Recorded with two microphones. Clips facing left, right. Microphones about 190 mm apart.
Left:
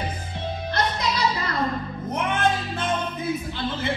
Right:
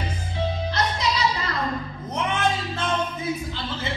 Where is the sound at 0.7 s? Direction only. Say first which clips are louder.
Left 4 dB; 55° left (ahead or behind).